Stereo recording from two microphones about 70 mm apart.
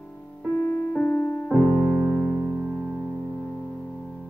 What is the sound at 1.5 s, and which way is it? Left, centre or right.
Piano, centre.